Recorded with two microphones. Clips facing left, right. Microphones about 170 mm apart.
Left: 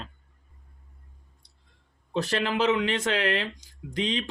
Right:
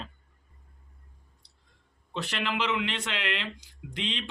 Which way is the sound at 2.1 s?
40° left (ahead or behind).